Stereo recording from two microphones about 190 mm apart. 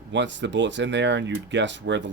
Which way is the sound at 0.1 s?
70° right (ahead or behind).